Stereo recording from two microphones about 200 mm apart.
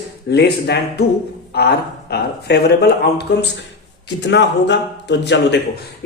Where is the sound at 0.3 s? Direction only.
55° left (ahead or behind).